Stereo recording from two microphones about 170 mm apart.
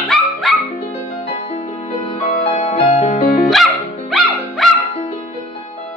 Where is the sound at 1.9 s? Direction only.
40° left (ahead or behind).